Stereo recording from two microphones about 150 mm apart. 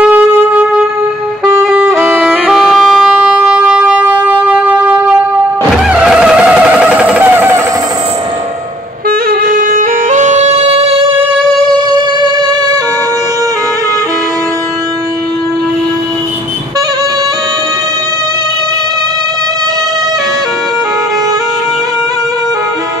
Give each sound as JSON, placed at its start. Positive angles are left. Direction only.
{"t": 0.0, "sound": "wind instrument", "side_deg": -10}
{"t": 1.4, "sound": "music", "side_deg": -10}
{"t": 2.0, "sound": "music", "side_deg": 0}
{"t": 5.9, "sound": "vehicle", "side_deg": -5}
{"t": 9.3, "sound": "music", "side_deg": -80}
{"t": 11.7, "sound": "music", "side_deg": -25}